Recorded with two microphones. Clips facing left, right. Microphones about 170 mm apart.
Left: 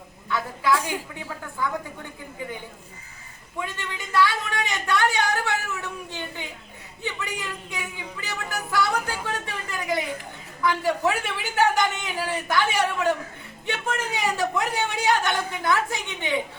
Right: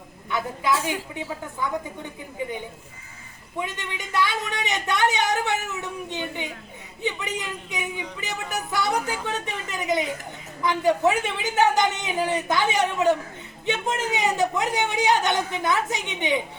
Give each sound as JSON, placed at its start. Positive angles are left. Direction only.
{"t": 0.3, "sound": "speech", "side_deg": -20}
{"t": 3.6, "sound": "speech", "side_deg": -20}